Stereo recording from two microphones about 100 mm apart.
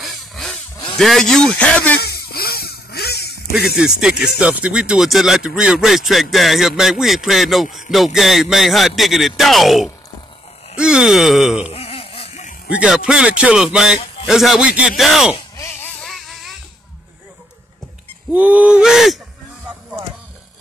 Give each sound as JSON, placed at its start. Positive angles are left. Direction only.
{"t": 0.0, "sound": "chainsaw", "side_deg": 0}
{"t": 0.9, "sound": "speech", "side_deg": 5}
{"t": 3.5, "sound": "a man's voice", "side_deg": -5}
{"t": 11.7, "sound": "a sound", "side_deg": 75}
{"t": 12.6, "sound": "a man's voice", "side_deg": -10}
{"t": 15.8, "sound": "a sound", "side_deg": 5}
{"t": 18.3, "sound": "a man's voice", "side_deg": -15}